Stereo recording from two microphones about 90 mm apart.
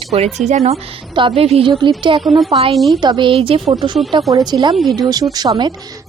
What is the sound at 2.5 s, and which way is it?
Speech, 80° right.